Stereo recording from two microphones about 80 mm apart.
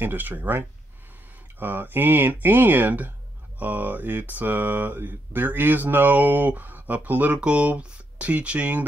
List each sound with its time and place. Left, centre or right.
0.0 s mantra: right